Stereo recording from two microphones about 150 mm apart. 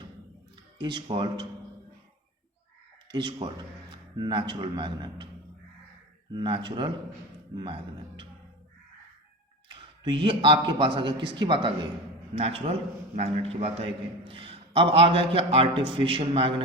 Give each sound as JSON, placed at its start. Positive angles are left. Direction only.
{"t": 0.8, "sound": "a man's voice", "side_deg": -30}
{"t": 3.1, "sound": "speech", "side_deg": -30}
{"t": 6.3, "sound": "a man's voice", "side_deg": -30}
{"t": 10.0, "sound": "a man's voice", "side_deg": -35}